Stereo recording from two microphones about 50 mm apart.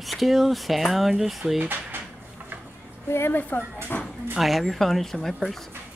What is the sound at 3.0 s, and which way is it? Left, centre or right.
Speech, left.